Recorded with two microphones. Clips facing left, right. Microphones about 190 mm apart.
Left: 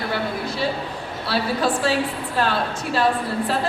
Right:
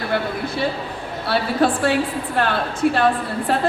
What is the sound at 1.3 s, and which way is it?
A woman's voice, 55° right (ahead or behind).